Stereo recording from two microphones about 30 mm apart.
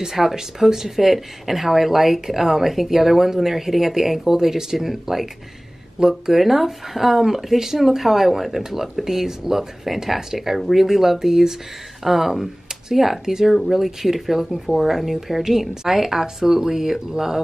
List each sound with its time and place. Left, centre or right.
0.0 s speech: centre
13.2 s speech: centre
13.7 s speech: centre